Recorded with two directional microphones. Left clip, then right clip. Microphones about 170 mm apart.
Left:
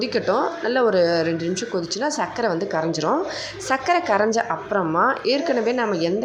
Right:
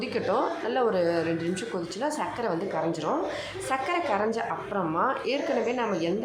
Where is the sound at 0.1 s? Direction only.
25° left (ahead or behind).